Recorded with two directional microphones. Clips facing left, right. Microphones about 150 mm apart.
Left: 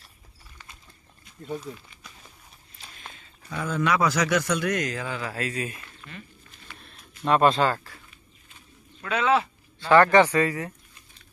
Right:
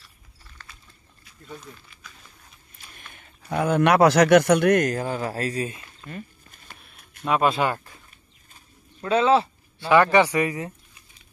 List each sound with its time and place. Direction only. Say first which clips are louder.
0.6 s a sound: even; 15° left (ahead or behind)
3.0 s speech: left 4 dB; 60° right (ahead or behind); by 5.8 s 35° right (ahead or behind)
6.0 s a sound: right 8 dB; 45° right (ahead or behind)
7.2 s speech: left 1 dB; 5° right (ahead or behind)
9.0 s speech: right 4 dB; 30° right (ahead or behind)
9.8 s speech: even; 10° right (ahead or behind)